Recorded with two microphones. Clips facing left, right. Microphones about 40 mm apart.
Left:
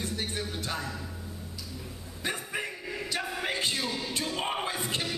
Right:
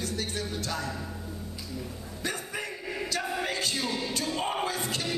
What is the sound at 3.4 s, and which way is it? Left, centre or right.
Music, left.